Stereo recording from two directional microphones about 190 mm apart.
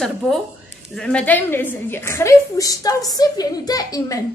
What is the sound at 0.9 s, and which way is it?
A woman's voice, 5° left (ahead or behind).